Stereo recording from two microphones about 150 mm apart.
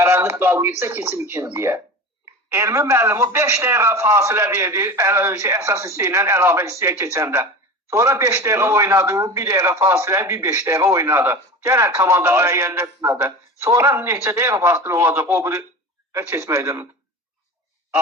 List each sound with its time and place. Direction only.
0.0 s a man's voice: 15° right (ahead or behind)